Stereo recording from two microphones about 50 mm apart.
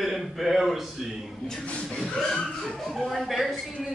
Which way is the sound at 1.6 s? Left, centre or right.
Left.